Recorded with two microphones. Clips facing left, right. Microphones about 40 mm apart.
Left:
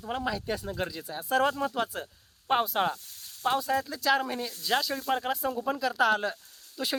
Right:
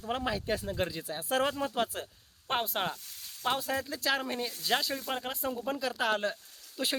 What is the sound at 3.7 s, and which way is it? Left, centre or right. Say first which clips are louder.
Speech: left 5 dB; centre.